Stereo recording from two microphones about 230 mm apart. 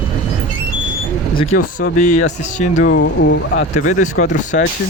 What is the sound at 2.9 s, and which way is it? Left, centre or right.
Speech, left.